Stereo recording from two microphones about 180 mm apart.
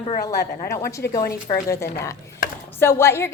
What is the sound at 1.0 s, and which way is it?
Speech, 60° left (ahead or behind).